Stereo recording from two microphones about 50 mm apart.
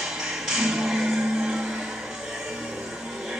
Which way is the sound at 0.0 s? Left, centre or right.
Centre.